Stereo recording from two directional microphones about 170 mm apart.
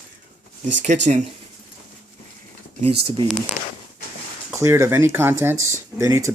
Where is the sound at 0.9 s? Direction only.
45° right (ahead or behind).